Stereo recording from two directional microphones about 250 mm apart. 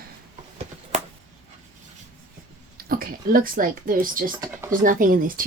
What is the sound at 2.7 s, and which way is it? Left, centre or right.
Speech, right.